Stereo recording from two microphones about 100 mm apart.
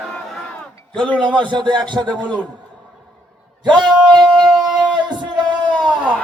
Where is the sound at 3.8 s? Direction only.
45° right (ahead or behind).